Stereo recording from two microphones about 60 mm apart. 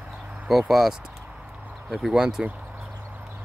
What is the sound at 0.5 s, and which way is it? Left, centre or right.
Speech, centre.